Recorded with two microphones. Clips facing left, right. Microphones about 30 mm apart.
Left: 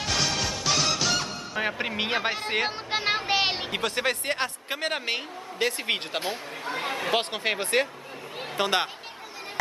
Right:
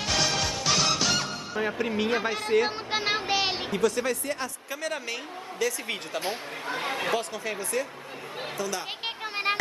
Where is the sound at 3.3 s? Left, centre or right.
Centre.